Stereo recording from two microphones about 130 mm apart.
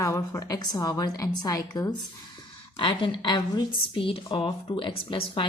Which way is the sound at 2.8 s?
40° left (ahead or behind).